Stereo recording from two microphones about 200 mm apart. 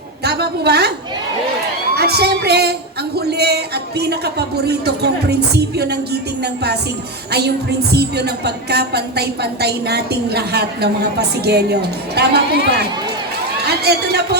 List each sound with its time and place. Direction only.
0.3 s a woman's voice: 55° right (ahead or behind)
2.0 s a woman's voice: 55° right (ahead or behind)
7.9 s a woman's voice: 55° right (ahead or behind)